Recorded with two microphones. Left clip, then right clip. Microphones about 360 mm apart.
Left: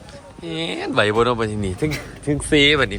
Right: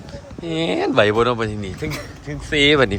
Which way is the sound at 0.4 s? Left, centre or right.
Centre.